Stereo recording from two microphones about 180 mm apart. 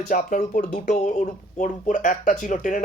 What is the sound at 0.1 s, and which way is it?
Speech, 50° left (ahead or behind).